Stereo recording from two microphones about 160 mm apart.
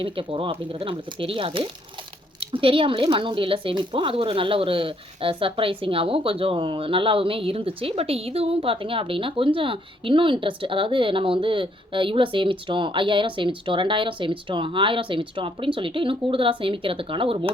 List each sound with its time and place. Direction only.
0.0 s a woman's voice: 35° right (ahead or behind)